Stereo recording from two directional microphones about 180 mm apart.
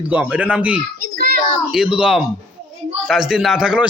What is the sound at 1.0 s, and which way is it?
Child singing, 55° right (ahead or behind).